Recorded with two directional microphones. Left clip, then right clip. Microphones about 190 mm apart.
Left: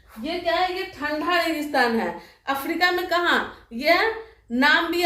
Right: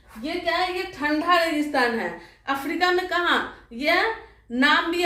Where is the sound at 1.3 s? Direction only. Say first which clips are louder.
Right 1 dB; 20° left (ahead or behind).